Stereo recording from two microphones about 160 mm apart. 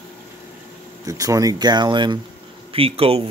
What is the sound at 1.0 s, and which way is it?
Speech, 20° right (ahead or behind).